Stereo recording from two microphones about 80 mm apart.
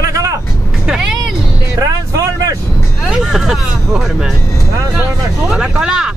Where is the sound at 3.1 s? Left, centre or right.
Centre.